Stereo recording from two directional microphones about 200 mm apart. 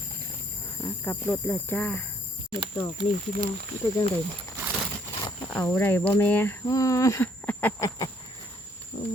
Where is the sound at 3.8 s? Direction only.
15° left (ahead or behind).